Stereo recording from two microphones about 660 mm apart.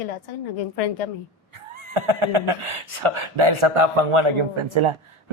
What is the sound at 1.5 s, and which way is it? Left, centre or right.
Speech, right.